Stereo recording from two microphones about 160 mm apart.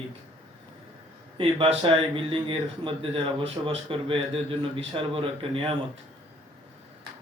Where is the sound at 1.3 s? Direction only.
35° right (ahead or behind).